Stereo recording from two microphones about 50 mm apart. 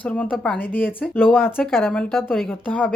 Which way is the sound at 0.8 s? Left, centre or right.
Left.